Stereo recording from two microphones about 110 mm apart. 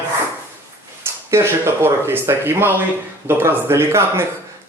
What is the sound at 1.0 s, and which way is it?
A man's voice, 25° right (ahead or behind).